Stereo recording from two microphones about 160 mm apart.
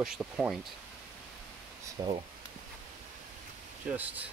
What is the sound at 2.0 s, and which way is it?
Speech, 25° right (ahead or behind).